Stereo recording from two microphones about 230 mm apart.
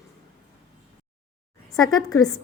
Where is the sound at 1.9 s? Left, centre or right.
Centre.